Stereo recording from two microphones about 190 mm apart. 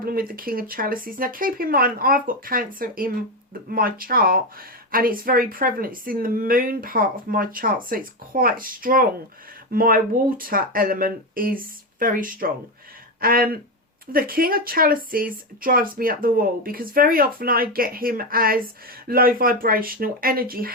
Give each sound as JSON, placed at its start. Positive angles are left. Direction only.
{"t": 0.0, "sound": "speech", "side_deg": -50}